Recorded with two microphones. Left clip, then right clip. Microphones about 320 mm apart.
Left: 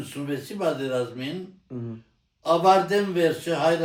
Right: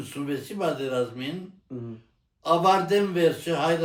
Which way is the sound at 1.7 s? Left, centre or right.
Left.